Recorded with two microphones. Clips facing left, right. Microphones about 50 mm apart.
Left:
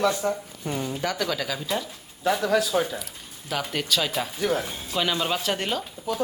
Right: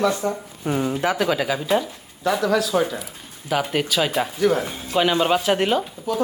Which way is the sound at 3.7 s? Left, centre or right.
Centre.